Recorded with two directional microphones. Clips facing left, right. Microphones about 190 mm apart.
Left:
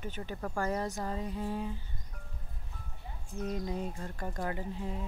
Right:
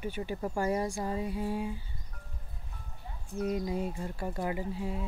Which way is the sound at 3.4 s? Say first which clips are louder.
Right 4 dB; 10° right (ahead or behind).